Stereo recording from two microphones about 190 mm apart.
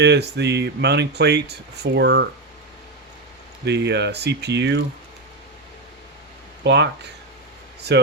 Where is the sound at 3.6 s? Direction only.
60° right (ahead or behind).